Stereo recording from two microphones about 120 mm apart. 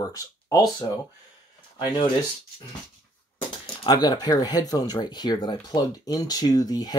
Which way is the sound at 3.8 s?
35° left (ahead or behind).